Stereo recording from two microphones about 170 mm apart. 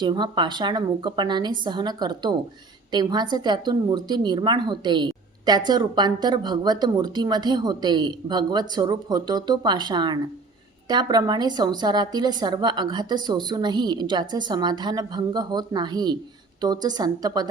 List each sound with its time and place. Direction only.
0.0 s a woman's voice: 25° right (ahead or behind)